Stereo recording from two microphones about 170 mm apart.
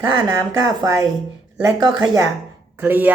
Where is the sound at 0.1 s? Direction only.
20° right (ahead or behind).